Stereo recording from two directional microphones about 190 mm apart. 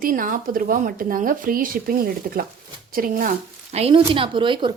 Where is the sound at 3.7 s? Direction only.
30° right (ahead or behind).